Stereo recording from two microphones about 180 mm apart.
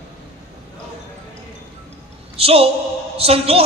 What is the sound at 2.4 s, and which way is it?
A woman's voice, 30° right (ahead or behind).